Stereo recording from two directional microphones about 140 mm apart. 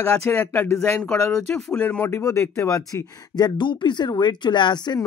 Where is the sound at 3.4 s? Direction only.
35° left (ahead or behind).